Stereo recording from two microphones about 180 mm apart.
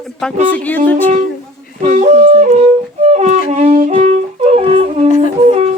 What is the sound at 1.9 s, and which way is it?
Music, 40° right (ahead or behind).